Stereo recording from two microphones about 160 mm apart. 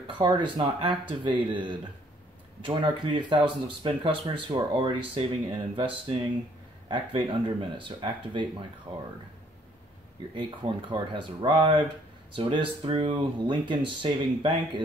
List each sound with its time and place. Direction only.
0.0 s speech: 30° right (ahead or behind)
2.6 s speech: 30° right (ahead or behind)
10.3 s speech: 30° right (ahead or behind)